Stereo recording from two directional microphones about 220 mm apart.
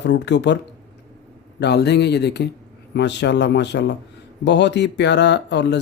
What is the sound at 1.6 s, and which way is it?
Speech, 50° left (ahead or behind).